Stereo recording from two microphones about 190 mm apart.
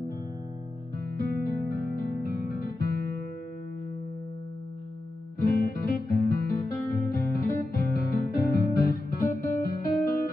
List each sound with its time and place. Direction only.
1.1 s music: 50° left (ahead or behind)
5.4 s guitar: 50° left (ahead or behind)